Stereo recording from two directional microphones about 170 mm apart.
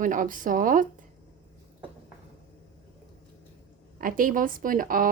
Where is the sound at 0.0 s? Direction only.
50° right (ahead or behind).